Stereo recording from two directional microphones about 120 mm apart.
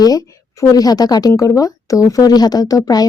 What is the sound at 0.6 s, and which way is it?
Speech, 30° left (ahead or behind).